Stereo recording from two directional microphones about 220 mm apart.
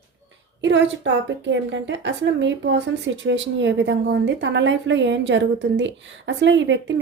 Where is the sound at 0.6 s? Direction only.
55° right (ahead or behind).